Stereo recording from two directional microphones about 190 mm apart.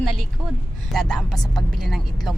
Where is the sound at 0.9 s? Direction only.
Centre (ahead or behind).